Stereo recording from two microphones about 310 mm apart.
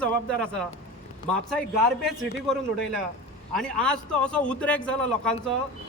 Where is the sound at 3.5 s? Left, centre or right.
Centre.